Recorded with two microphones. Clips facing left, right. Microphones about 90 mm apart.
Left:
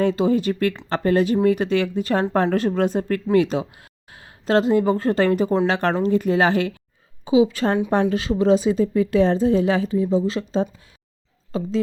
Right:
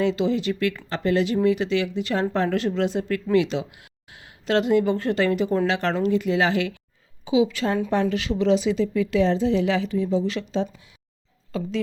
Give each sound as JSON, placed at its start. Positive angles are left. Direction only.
{"t": 0.0, "sound": "speech", "side_deg": 45}